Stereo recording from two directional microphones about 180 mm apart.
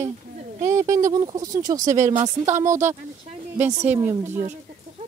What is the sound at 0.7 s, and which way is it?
A woman's voice, 20° right (ahead or behind).